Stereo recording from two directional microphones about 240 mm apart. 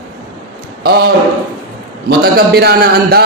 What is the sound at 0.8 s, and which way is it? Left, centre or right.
Speech, right.